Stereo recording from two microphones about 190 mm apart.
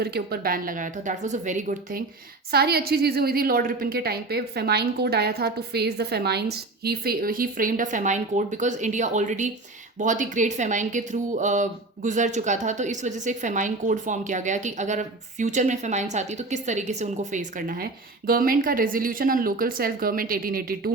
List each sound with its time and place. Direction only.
0.0 s a woman's voice: 55° right (ahead or behind)